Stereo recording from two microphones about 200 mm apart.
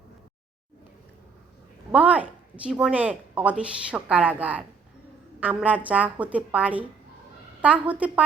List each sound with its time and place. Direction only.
1.9 s speech: 5° right (ahead or behind)